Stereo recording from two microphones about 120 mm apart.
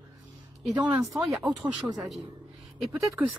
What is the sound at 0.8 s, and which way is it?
A woman's voice, 10° right (ahead or behind).